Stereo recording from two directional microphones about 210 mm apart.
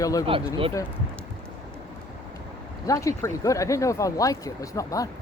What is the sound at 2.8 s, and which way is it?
Speech, 15° left (ahead or behind).